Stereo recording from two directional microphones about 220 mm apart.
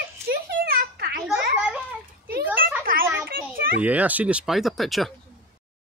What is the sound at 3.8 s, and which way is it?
Speech, 5° right (ahead or behind).